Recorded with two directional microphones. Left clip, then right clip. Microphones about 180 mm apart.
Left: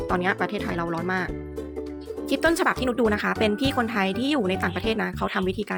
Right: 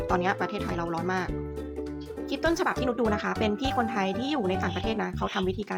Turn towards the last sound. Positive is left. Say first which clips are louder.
# left 3 dB
turn(degrees=20)  # may be behind; listen again after turning